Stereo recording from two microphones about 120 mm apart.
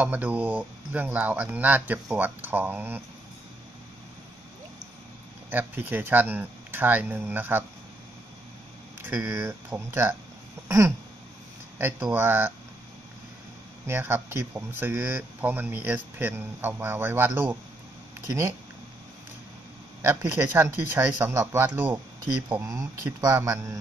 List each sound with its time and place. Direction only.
0.0 s speech: 15° right (ahead or behind)
5.5 s speech: 15° right (ahead or behind)
9.0 s speech: 20° right (ahead or behind)
11.8 s speech: 15° right (ahead or behind)
13.8 s speech: 20° right (ahead or behind)
20.0 s speech: 20° right (ahead or behind)
21.9 s speech: 30° right (ahead or behind)